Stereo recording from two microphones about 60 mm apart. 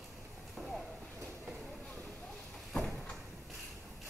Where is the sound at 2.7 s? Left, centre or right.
Centre.